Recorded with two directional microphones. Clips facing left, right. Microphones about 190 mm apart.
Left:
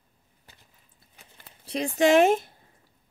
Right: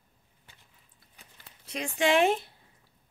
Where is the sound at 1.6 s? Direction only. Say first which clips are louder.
Left 6 dB; 35° left (ahead or behind).